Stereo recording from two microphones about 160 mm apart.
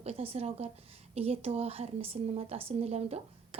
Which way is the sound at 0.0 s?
40° right (ahead or behind).